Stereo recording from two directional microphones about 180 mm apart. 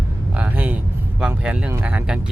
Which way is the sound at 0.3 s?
10° right (ahead or behind).